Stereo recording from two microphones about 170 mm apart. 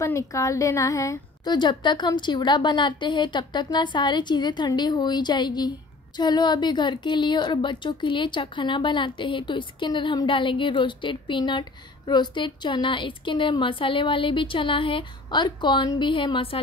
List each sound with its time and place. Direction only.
0.0 s a woman's voice: 15° left (ahead or behind)